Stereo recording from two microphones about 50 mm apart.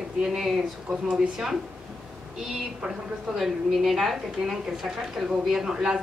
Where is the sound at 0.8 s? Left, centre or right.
Right.